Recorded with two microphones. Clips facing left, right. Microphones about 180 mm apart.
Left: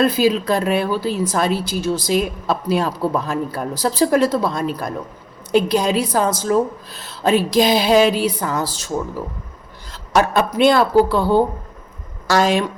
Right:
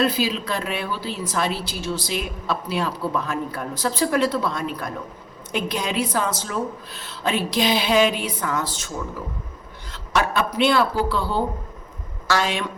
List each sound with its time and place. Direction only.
0.0 s a woman's voice: 45° left (ahead or behind)
9.9 s a woman's voice: 40° left (ahead or behind)